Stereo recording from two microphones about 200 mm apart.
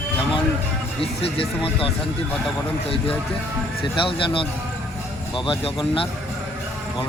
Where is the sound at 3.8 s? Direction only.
25° left (ahead or behind).